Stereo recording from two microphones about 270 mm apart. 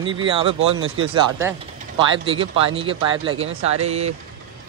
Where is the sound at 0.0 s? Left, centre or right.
Centre.